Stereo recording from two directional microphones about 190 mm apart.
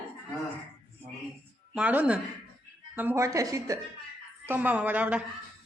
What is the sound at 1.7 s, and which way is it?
Speech, 5° right (ahead or behind).